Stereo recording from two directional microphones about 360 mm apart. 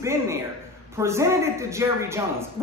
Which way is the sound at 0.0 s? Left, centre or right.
Centre.